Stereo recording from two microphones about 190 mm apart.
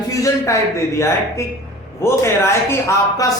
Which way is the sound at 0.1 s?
15° left (ahead or behind).